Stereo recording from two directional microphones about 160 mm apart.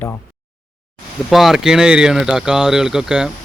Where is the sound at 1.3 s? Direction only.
Centre (ahead or behind).